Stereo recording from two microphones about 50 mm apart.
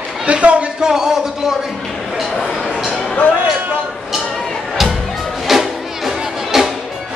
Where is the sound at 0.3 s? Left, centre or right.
Right.